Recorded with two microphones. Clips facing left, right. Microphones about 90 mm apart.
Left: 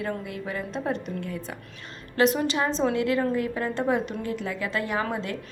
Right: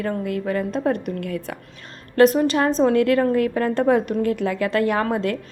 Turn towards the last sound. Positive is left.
turn(degrees=-55)  # may be behind; listen again after turning